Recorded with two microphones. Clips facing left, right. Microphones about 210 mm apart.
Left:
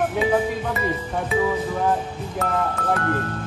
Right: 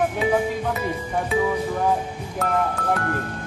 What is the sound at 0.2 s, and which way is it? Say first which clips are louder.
Music: even; centre (ahead or behind).